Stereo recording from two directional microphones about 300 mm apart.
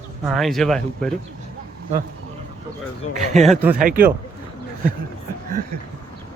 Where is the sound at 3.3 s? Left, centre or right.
Right.